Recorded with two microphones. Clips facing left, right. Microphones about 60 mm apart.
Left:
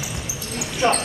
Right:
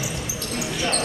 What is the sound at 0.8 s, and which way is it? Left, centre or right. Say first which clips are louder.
Basketball bounce: left 8 dB; left.